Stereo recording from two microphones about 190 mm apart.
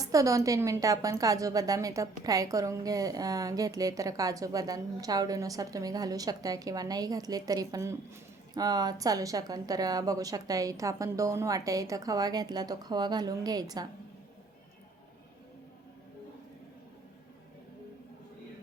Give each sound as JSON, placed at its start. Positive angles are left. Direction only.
{"t": 0.0, "sound": "a woman's voice", "side_deg": -15}